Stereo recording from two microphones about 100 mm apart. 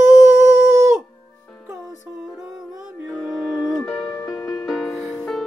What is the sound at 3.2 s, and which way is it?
Music, 5° right (ahead or behind).